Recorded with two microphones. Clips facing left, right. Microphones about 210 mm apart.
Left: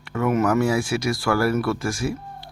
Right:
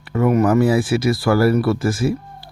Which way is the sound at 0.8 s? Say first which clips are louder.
Right 6 dB; 5° right (ahead or behind).